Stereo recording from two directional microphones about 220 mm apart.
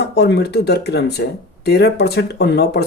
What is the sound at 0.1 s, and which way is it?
Speech, 50° left (ahead or behind).